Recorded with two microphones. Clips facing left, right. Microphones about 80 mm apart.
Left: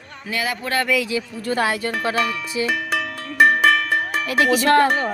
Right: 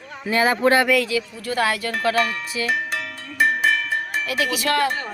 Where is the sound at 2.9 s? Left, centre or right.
Left.